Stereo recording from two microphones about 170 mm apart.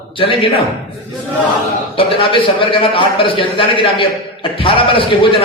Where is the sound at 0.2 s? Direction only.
30° left (ahead or behind).